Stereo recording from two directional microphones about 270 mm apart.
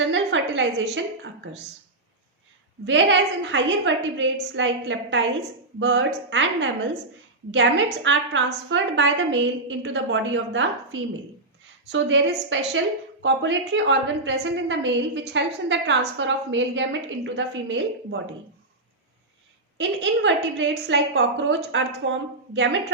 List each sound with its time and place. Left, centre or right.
0.0 s a sound: right
2.8 s a woman's voice: right
8.0 s a woman's voice: right
11.9 s a woman's voice: right
19.7 s a woman's voice: right